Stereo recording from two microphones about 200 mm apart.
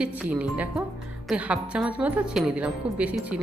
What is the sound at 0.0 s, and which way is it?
A woman's voice, 5° right (ahead or behind).